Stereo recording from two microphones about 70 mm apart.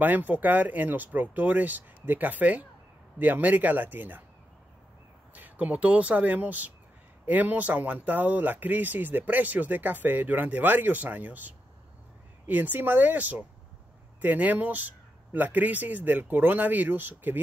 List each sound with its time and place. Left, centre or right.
0.0 s speech: right
5.3 s speech: right